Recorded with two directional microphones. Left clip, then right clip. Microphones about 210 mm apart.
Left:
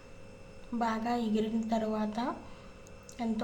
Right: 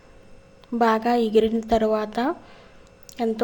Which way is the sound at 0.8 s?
35° right (ahead or behind).